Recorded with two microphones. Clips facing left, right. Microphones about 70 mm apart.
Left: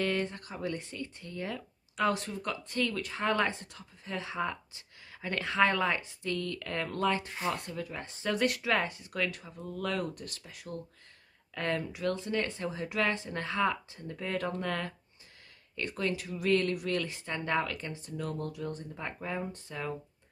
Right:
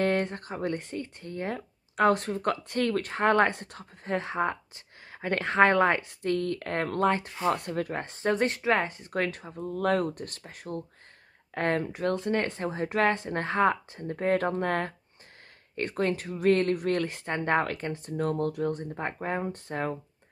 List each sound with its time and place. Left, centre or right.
0.0 s speech: right
7.4 s speech: right
8.3 s speech: right
17.3 s speech: right